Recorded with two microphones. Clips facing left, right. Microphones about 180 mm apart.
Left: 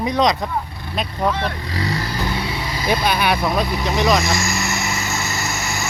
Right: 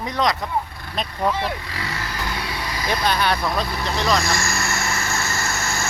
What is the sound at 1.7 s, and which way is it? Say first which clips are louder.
Vehicle: left 6 dB; 35° left (ahead or behind).